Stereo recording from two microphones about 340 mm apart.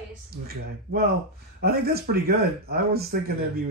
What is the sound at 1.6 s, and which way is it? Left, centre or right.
Speech, right.